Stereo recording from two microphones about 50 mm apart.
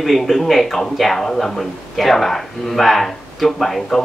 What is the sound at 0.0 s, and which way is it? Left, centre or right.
Speech, centre.